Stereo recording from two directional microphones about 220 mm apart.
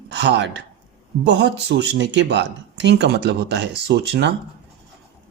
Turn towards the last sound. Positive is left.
turn(degrees=-50)  # may be behind; listen again after turning